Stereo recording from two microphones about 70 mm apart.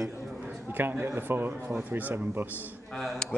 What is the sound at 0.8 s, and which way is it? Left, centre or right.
Speech, right.